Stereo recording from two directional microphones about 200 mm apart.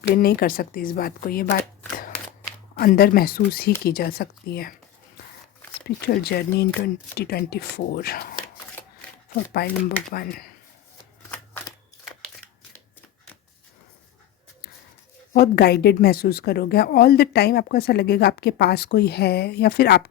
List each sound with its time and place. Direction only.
0.2 s a woman's voice: 50° left (ahead or behind)
2.7 s a woman's voice: 50° left (ahead or behind)
6.1 s a woman's voice: 50° left (ahead or behind)
15.3 s a woman's voice: 50° left (ahead or behind)